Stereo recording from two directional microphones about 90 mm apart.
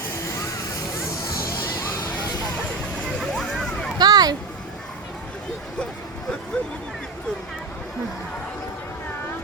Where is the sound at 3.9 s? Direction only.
45° right (ahead or behind).